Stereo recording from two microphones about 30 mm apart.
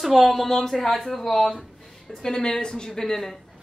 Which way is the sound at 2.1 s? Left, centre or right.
Left.